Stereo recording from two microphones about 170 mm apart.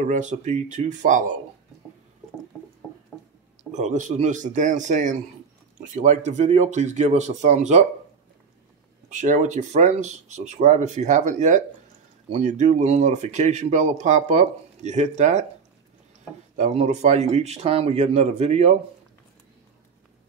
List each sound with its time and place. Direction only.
0.0 s speech: 45° right (ahead or behind)
3.7 s speech: 45° right (ahead or behind)
9.1 s speech: 45° right (ahead or behind)
16.5 s speech: 40° right (ahead or behind)